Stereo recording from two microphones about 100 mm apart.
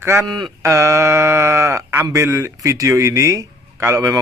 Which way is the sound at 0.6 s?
30° right (ahead or behind).